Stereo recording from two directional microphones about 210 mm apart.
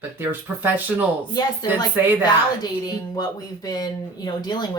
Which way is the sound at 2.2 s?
20° left (ahead or behind).